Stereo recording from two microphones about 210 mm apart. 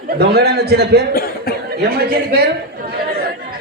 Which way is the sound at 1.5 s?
45° left (ahead or behind).